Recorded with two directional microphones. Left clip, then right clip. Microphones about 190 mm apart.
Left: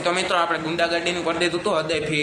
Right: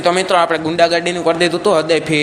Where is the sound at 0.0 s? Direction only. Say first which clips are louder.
Right 8 dB; 30° right (ahead or behind).